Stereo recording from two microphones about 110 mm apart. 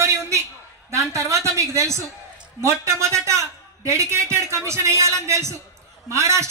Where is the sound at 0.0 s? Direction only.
25° right (ahead or behind).